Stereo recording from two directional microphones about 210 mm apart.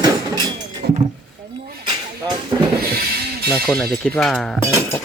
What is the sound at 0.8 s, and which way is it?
Speech, 45° right (ahead or behind).